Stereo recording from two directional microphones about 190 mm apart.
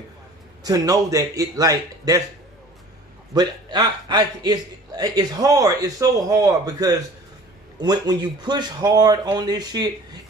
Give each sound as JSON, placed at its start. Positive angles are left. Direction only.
{"t": 0.7, "sound": "a man's voice", "side_deg": -20}
{"t": 3.3, "sound": "a man's voice", "side_deg": -20}